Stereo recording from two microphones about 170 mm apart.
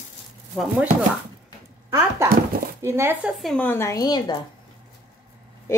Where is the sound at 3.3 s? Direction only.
5° left (ahead or behind); by 4.4 s 20° left (ahead or behind).